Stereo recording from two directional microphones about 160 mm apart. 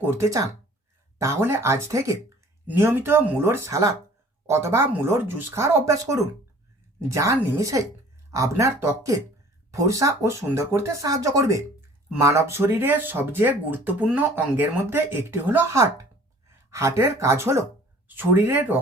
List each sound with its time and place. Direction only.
0.0 s speech: 15° right (ahead or behind)